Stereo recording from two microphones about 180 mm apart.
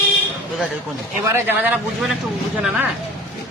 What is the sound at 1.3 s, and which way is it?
Speech, 10° right (ahead or behind).